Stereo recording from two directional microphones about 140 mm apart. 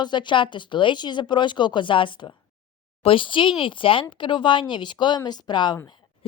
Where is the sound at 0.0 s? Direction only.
35° left (ahead or behind).